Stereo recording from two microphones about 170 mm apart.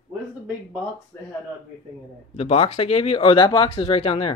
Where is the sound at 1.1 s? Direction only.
15° left (ahead or behind).